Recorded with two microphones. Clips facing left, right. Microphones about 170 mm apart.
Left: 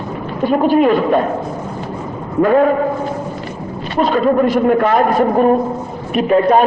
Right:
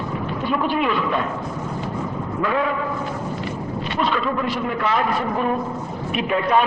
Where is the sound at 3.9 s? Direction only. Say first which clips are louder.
Left 10 dB; 45° left (ahead or behind).